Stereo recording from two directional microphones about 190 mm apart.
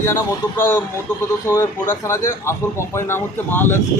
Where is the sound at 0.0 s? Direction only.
15° left (ahead or behind).